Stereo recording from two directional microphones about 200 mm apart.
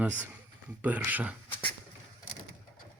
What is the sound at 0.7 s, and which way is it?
Speech, 10° right (ahead or behind).